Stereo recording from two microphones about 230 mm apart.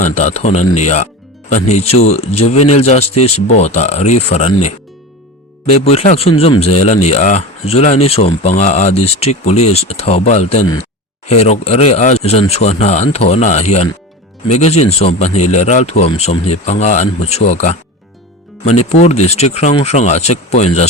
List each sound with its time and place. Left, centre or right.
0.0 s speech: left
5.7 s speech: left